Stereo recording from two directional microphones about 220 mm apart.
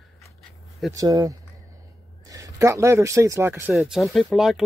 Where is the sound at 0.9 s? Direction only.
15° right (ahead or behind).